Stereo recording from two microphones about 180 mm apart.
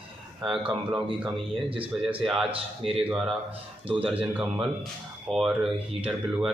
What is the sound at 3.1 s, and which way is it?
Speech, 5° right (ahead or behind).